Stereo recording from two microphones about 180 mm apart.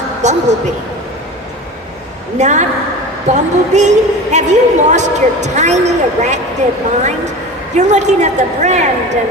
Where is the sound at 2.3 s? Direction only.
40° right (ahead or behind).